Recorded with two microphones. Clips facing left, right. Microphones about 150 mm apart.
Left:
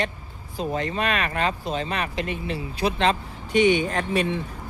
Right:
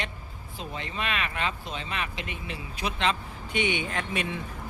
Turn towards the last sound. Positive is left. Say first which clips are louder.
# left 7 dB
turn(degrees=35)  # may be behind; listen again after turning